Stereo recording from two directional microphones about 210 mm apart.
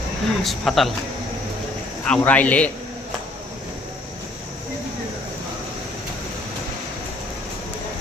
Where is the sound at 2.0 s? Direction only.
5° left (ahead or behind).